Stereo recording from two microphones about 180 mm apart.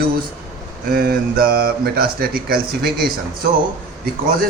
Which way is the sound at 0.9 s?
60° right (ahead or behind).